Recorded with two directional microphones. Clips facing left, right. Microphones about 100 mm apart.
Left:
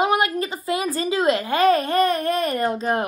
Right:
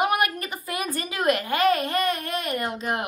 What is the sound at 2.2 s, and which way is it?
Speech, 45° left (ahead or behind).